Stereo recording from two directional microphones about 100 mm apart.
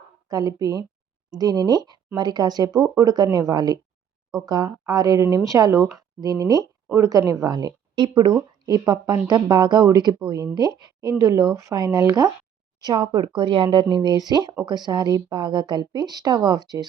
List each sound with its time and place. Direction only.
0.3 s a woman's voice: 35° right (ahead or behind); by 13.8 s 55° right (ahead or behind)
13.9 s a woman's voice: 40° right (ahead or behind)